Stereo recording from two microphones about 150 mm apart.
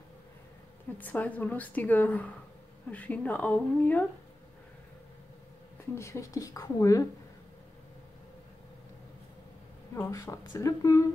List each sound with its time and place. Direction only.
0.9 s a woman's voice: 10° left (ahead or behind)
5.9 s speech: 20° left (ahead or behind)
9.9 s speech: 20° left (ahead or behind)